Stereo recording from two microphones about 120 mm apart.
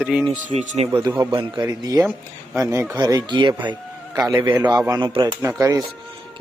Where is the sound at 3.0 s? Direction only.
35° right (ahead or behind).